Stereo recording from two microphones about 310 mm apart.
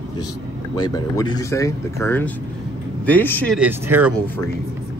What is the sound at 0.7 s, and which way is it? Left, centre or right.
Speech, centre.